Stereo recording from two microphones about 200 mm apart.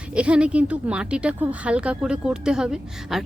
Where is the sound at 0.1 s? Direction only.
5° right (ahead or behind).